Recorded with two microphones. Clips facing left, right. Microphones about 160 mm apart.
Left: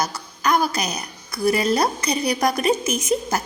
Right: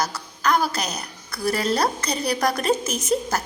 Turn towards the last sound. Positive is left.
turn(degrees=15)  # may be behind; listen again after turning